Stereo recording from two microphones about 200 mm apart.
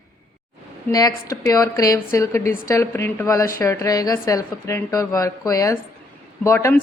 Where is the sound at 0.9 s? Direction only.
15° left (ahead or behind).